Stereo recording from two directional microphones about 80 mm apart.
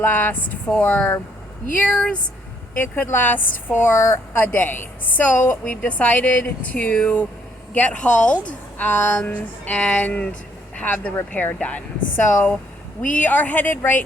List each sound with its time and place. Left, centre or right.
0.0 s a woman's voice: left